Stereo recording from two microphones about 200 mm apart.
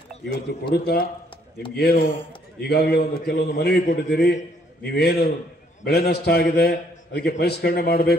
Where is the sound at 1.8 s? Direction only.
50° left (ahead or behind).